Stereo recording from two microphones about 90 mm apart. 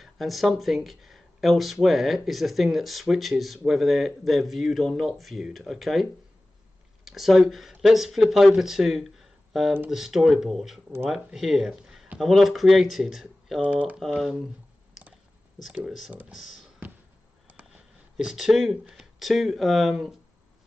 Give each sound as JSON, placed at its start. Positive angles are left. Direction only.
{"t": 0.0, "sound": "speech", "side_deg": 0}
{"t": 7.1, "sound": "speech", "side_deg": 0}
{"t": 13.6, "sound": "speech", "side_deg": -15}
{"t": 13.9, "sound": "speech", "side_deg": 0}
{"t": 15.6, "sound": "speech", "side_deg": -5}
{"t": 16.8, "sound": "basketball bounce", "side_deg": -20}
{"t": 18.1, "sound": "speech", "side_deg": -5}